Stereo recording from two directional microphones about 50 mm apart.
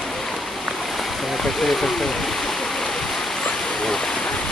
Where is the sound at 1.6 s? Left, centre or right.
Centre.